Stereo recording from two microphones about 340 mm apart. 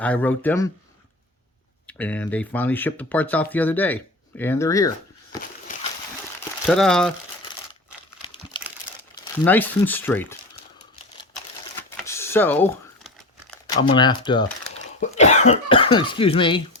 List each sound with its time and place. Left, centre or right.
0.0 s speech: centre
1.9 s speech: centre
6.7 s speech: centre
8.2 s crumpling: centre
9.4 s speech: centre
11.8 s a sound: centre
13.5 s speech: centre